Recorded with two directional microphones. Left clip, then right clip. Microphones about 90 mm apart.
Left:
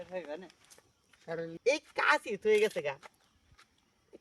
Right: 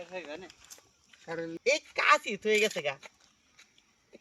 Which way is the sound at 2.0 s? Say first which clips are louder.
Right 3 dB; 10° right (ahead or behind).